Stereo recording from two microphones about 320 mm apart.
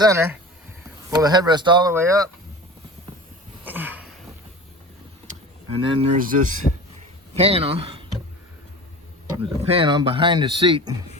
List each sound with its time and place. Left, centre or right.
0.0 s speech: centre
3.6 s a sound: centre
5.8 s speech: centre
9.3 s speech: centre